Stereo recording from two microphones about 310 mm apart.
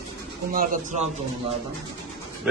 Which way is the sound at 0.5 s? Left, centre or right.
Right.